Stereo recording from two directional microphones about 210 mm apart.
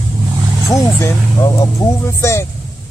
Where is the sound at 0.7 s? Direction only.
15° left (ahead or behind).